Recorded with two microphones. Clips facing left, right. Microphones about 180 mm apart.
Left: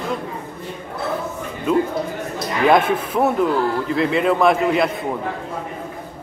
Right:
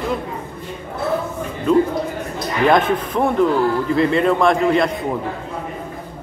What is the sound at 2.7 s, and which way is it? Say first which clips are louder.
A man's voice: even; 5° left (ahead or behind).